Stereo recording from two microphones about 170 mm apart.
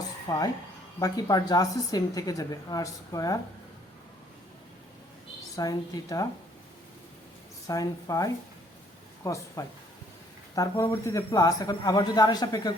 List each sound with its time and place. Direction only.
0.3 s a woman's voice: 20° left (ahead or behind)
5.5 s a woman's voice: 20° left (ahead or behind)
7.7 s a woman's voice: 20° left (ahead or behind)